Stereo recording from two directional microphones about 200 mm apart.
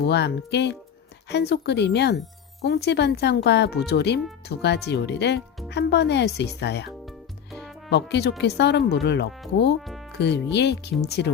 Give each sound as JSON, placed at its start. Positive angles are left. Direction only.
{"t": 0.0, "sound": "speech", "side_deg": 55}